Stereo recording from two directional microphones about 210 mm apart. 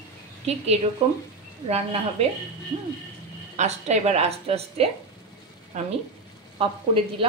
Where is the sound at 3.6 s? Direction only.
30° right (ahead or behind).